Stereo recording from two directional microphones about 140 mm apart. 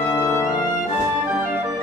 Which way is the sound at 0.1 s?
25° left (ahead or behind).